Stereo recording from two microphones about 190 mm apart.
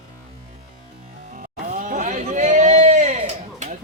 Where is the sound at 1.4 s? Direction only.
45° right (ahead or behind).